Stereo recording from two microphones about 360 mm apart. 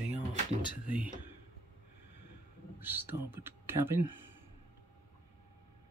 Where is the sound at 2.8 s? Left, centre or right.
Centre.